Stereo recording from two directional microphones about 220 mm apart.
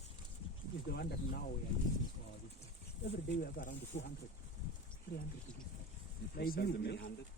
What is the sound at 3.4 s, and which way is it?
Speech, 35° left (ahead or behind).